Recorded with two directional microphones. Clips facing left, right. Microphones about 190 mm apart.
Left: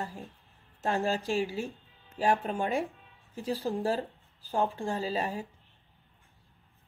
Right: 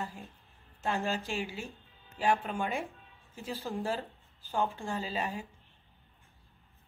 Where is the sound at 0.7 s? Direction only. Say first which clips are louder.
Left 3 dB; 40° left (ahead or behind).